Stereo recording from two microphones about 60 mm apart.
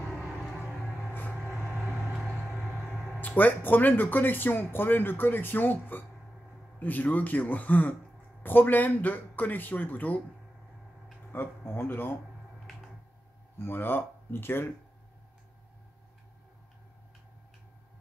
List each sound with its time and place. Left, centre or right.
2.6 s a sound: centre
3.2 s speech: left
11.3 s speech: left
13.6 s speech: left